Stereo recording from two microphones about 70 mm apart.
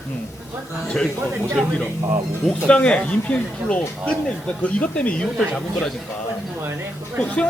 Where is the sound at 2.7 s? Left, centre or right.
Centre.